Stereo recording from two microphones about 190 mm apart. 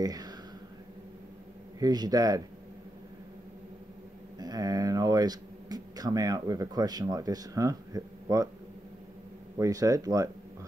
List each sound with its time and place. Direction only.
0.0 s speech: 20° right (ahead or behind)
1.8 s speech: 20° right (ahead or behind)
4.4 s speech: 20° right (ahead or behind)
9.6 s speech: 20° right (ahead or behind)